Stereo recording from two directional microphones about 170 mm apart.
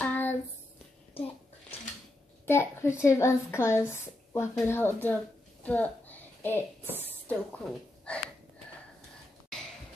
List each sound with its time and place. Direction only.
0.0 s hands: 10° left (ahead or behind)
2.4 s speech: 15° left (ahead or behind)
5.6 s a sound: 10° left (ahead or behind)
6.8 s a woman's voice: 10° right (ahead or behind)
7.2 s a woman's voice: 5° left (ahead or behind)